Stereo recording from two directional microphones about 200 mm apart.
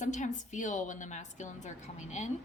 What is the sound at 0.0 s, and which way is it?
A woman's voice, 40° left (ahead or behind).